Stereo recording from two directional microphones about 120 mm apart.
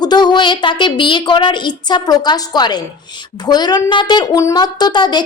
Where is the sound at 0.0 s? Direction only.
35° left (ahead or behind).